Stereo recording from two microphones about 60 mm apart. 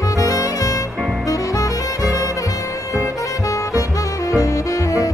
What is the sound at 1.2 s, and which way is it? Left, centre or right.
Music, left.